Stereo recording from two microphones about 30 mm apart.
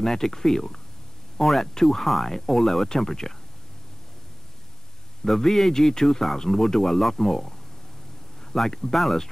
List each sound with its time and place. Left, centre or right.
0.0 s speech: centre
1.7 s speech: centre
5.2 s speech: centre
8.5 s speech: centre